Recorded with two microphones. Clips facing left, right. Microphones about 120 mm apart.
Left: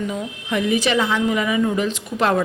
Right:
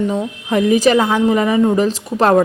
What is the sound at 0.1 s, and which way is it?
A woman's voice, 35° right (ahead or behind).